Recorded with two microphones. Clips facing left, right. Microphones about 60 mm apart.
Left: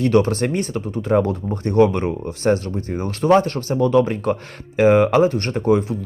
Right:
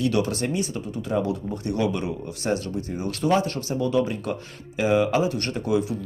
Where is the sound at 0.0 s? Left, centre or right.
Left.